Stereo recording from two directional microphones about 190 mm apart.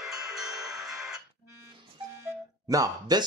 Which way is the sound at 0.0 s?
Centre (ahead or behind).